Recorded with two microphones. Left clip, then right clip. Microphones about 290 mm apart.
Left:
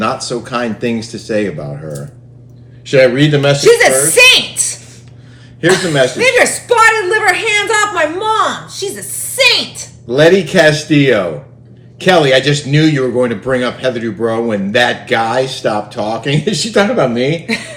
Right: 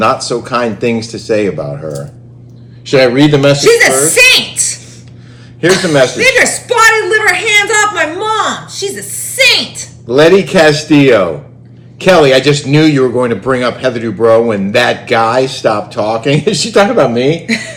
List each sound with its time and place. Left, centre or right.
0.0 s speech: centre
3.6 s a woman's voice: centre
5.6 s speech: centre
6.1 s a woman's voice: centre
10.1 s speech: centre
17.4 s a woman's voice: centre